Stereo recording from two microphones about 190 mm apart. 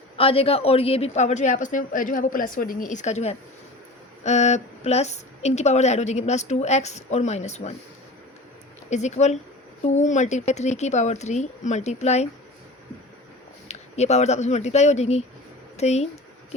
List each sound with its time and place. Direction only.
0.2 s a woman's voice: 30° left (ahead or behind)
8.9 s a woman's voice: 40° left (ahead or behind)
13.7 s a woman's voice: 35° left (ahead or behind)